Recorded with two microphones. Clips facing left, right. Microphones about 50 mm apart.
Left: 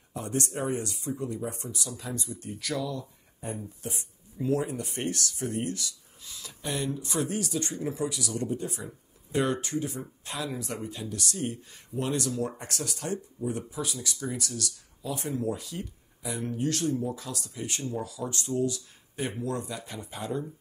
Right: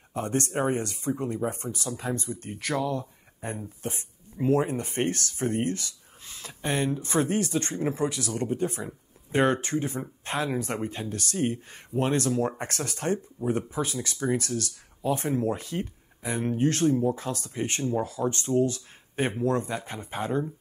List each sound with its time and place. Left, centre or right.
0.1 s speech: right